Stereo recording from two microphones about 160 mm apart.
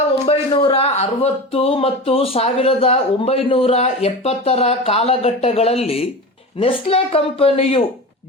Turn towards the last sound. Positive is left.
turn(degrees=35)  # may be behind; listen again after turning